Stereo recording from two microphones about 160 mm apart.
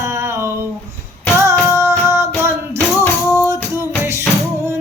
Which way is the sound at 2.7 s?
15° left (ahead or behind).